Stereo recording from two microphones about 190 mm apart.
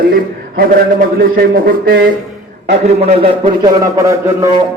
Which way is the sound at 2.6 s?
35° right (ahead or behind).